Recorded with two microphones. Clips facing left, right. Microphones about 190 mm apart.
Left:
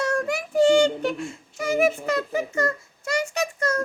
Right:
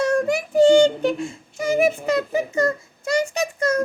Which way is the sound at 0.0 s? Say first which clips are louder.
Right 5 dB; 15° right (ahead or behind).